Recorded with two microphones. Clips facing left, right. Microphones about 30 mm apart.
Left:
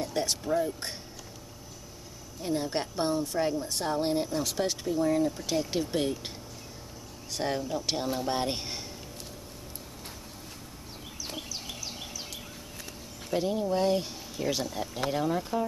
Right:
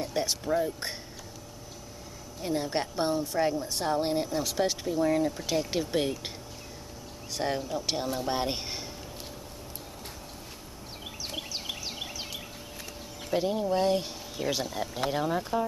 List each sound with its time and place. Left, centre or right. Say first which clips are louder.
0.0 s speech: even; centre
2.4 s speech: right 1 dB; centre
7.3 s speech: even; centre
11.3 s a sound: right 4 dB; right
13.3 s speech: right 1 dB; centre